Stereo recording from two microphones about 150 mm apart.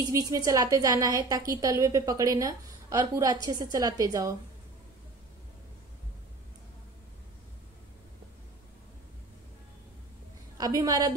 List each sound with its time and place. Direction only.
0.1 s a woman's voice: 20° right (ahead or behind)
10.6 s a woman's voice: 25° right (ahead or behind)